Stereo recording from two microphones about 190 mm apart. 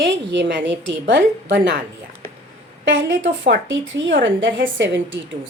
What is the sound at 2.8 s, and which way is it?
A woman's voice, 75° right (ahead or behind).